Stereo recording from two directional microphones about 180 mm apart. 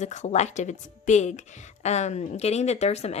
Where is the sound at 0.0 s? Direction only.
40° left (ahead or behind).